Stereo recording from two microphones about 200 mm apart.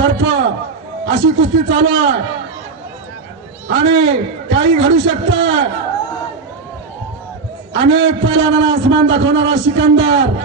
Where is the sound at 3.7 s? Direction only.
65° right (ahead or behind).